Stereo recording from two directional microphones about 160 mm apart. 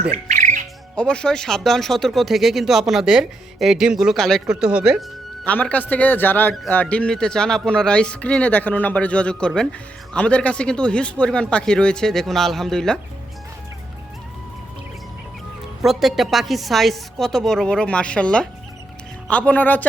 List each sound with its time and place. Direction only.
0.1 s music: 50° right (ahead or behind)
0.9 s speech: 5° left (ahead or behind)
5.5 s a man's voice: 10° left (ahead or behind)
15.8 s a man's voice: centre (ahead or behind)